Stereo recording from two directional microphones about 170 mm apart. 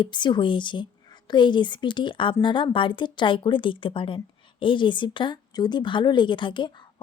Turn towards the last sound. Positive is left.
turn(degrees=25)  # may be behind; listen again after turning